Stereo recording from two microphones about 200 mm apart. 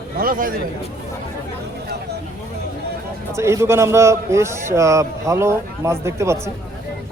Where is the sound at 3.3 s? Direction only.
15° right (ahead or behind).